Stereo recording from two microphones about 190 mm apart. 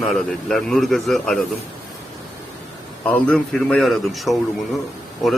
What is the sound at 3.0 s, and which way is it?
Speech, 5° left (ahead or behind).